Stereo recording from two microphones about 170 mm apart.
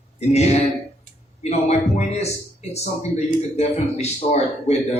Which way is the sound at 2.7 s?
40° left (ahead or behind).